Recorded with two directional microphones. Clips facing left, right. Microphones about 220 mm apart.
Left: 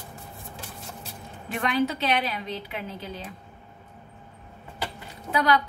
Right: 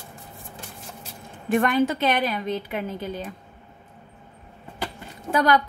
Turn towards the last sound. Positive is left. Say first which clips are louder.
# right 3 dB
turn(degrees=-45)  # may be behind; listen again after turning